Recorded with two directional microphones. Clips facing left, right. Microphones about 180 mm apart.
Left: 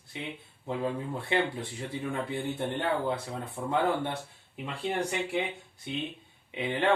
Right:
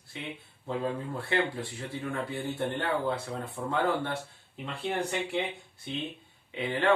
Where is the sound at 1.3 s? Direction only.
20° left (ahead or behind).